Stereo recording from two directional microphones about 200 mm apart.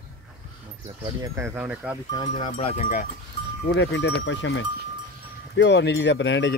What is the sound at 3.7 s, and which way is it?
Speech, 65° left (ahead or behind).